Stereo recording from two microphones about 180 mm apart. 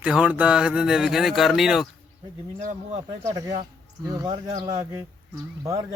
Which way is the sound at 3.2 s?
20° right (ahead or behind).